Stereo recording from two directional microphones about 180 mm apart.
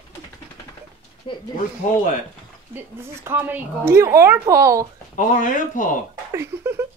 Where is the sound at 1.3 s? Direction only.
25° left (ahead or behind).